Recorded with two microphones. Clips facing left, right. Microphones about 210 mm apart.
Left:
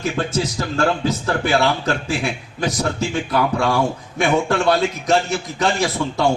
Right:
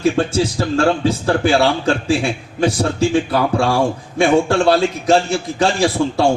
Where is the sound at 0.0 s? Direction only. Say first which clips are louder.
Right 6 dB; 30° right (ahead or behind).